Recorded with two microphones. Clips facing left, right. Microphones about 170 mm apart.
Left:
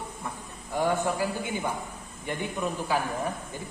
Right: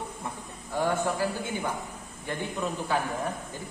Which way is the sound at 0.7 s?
15° left (ahead or behind).